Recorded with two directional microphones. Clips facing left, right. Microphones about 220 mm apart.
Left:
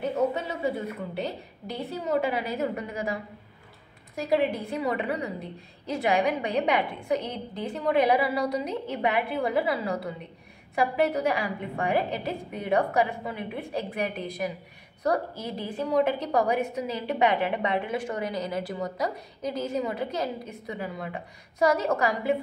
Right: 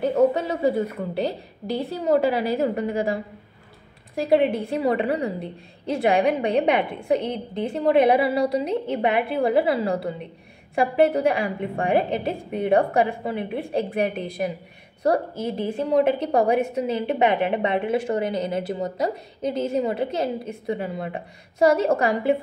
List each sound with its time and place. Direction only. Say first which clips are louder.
0.3 s a woman's voice: right 7 dB; 40° right (ahead or behind)